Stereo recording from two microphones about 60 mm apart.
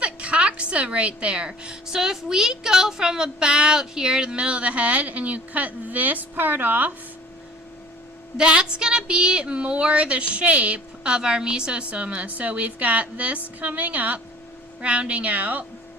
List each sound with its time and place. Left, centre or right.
0.0 s a woman's voice: centre
8.4 s a woman's voice: centre